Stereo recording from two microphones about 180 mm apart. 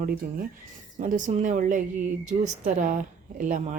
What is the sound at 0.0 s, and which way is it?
Speech, 50° right (ahead or behind).